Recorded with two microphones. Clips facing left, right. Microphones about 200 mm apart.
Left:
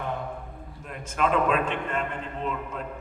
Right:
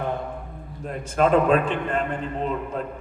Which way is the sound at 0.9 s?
35° right (ahead or behind).